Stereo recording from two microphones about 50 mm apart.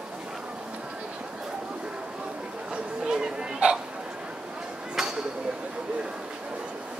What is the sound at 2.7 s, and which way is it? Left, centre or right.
Chatter, centre.